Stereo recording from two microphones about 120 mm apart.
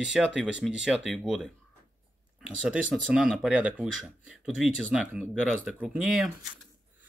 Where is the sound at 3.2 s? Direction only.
Centre (ahead or behind).